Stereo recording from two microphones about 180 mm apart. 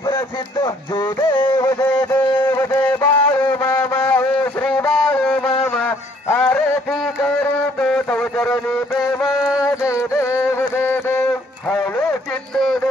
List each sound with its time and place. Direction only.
0.9 s music: 20° left (ahead or behind); by 9.7 s 5° right (ahead or behind)
9.7 s music: 15° left (ahead or behind)
11.7 s a sound: 10° left (ahead or behind)